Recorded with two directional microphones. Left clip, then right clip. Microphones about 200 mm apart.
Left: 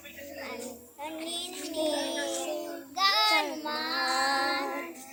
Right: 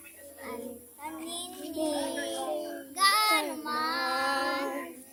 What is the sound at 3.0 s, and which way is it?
Child singing, 50° right (ahead or behind).